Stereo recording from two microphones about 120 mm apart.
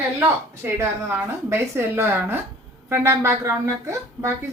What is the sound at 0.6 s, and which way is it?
A woman's voice, 20° right (ahead or behind).